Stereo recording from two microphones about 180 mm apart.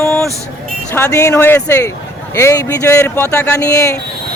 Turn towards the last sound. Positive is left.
turn(degrees=15)  # may be behind; listen again after turning